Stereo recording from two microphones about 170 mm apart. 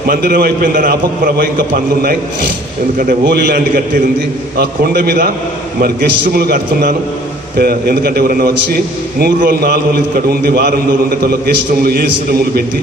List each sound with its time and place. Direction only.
0.1 s a man's voice: 65° right (ahead or behind)